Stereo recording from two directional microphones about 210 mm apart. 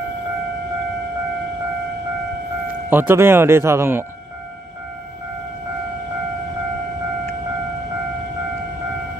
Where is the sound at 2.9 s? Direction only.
10° right (ahead or behind).